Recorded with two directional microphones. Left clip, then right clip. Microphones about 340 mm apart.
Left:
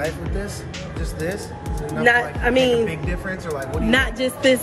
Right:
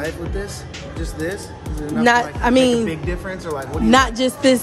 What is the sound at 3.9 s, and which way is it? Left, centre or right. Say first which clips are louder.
Speech: right 5 dB; centre.